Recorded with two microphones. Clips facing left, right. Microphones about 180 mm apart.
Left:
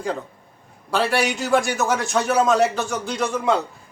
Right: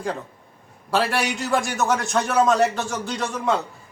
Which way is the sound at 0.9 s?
Centre (ahead or behind).